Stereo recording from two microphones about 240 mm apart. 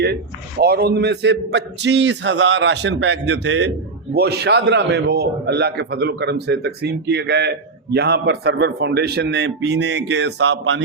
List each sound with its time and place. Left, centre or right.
0.6 s a man's voice: right